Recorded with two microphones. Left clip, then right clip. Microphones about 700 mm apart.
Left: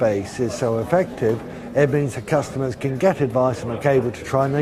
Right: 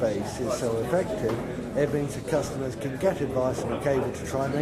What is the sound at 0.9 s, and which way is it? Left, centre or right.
Speech, left.